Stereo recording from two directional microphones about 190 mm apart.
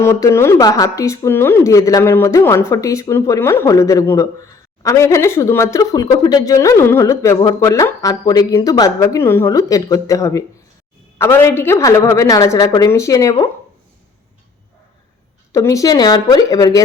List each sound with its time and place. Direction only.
0.0 s speech: 15° left (ahead or behind)
15.5 s speech: 15° left (ahead or behind)